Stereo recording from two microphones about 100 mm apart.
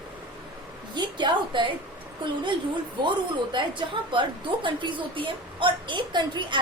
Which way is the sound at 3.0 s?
55° right (ahead or behind).